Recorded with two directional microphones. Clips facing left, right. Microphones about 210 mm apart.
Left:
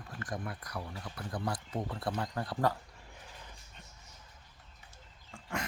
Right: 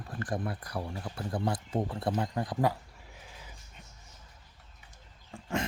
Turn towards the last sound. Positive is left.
turn(degrees=-25)  # may be behind; listen again after turning